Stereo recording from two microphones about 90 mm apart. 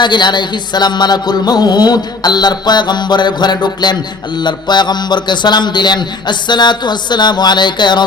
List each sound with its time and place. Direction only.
0.0 s music: 55° left (ahead or behind)
4.4 s a man's voice: 55° left (ahead or behind)